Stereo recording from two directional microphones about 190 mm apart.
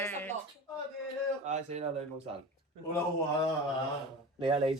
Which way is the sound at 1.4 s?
35° right (ahead or behind).